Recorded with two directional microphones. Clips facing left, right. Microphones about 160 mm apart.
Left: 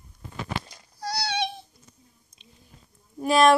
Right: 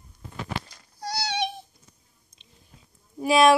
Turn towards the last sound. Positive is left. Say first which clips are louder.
# even
turn(degrees=-5)  # may be behind; listen again after turning